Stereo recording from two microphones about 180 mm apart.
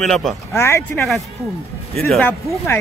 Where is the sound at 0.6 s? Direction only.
15° left (ahead or behind).